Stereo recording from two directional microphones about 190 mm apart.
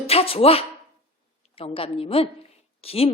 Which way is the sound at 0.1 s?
30° left (ahead or behind).